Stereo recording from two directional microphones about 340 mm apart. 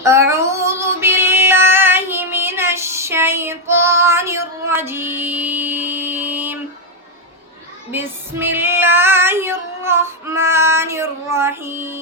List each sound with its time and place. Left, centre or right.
0.0 s child singing: centre
7.9 s female singing: centre